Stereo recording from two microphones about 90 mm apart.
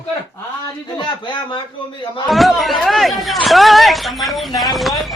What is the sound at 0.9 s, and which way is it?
Speech, 60° left (ahead or behind).